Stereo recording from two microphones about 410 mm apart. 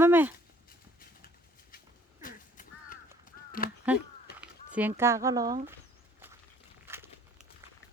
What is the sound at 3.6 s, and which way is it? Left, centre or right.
Speech, left.